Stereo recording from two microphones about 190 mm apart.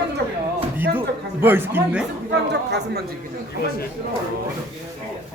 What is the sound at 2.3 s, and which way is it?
Chatter, 60° right (ahead or behind).